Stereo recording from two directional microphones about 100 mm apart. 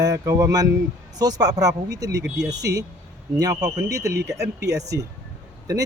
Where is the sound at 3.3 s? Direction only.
40° right (ahead or behind).